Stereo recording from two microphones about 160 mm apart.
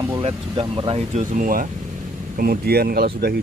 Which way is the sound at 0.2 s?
35° right (ahead or behind).